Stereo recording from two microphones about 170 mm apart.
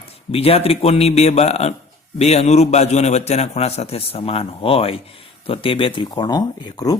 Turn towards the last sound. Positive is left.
turn(degrees=20)  # may be behind; listen again after turning